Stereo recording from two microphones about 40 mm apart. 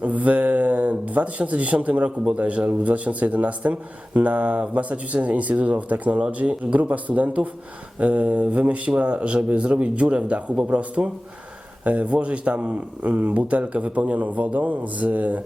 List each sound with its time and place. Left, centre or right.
0.0 s a man's voice: right
2.0 s speech: right
2.4 s a man's voice: right